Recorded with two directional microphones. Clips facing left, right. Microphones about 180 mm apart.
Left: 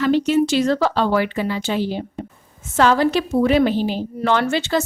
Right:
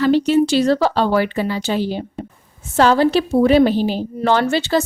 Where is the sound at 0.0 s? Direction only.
35° right (ahead or behind).